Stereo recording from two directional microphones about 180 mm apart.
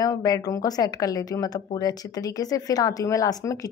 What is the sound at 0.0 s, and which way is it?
Speech, 20° left (ahead or behind).